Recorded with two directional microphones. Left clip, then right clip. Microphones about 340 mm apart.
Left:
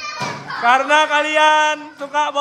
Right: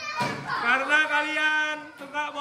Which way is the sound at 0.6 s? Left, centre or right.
Centre.